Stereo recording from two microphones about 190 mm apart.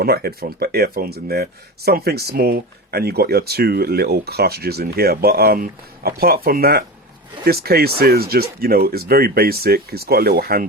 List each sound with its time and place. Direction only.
0.0 s speech: 55° right (ahead or behind)